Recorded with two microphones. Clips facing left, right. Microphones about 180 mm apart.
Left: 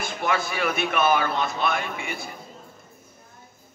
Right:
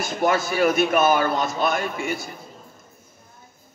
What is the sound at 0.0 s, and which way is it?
A man's voice, 40° right (ahead or behind).